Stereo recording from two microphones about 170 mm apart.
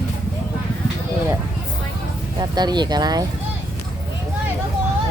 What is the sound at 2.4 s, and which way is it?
Speech, 25° right (ahead or behind).